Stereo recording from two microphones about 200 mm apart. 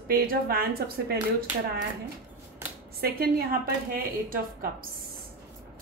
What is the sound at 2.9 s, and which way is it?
A woman's voice, 50° right (ahead or behind).